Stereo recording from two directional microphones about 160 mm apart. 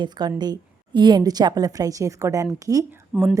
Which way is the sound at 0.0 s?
25° right (ahead or behind).